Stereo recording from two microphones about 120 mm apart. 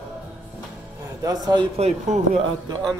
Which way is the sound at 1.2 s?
35° right (ahead or behind).